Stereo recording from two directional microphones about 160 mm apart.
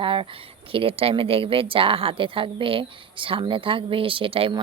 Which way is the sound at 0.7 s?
35° right (ahead or behind).